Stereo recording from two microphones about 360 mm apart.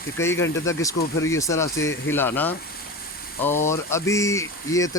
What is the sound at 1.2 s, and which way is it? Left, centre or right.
Speech, centre.